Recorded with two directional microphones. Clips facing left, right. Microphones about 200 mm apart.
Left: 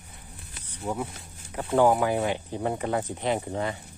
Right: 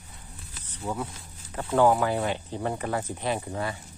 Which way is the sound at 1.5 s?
15° left (ahead or behind).